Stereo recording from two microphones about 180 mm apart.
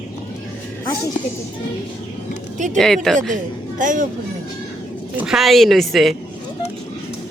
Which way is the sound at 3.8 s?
45° right (ahead or behind).